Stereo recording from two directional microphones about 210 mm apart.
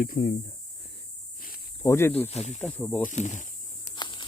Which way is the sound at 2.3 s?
30° left (ahead or behind).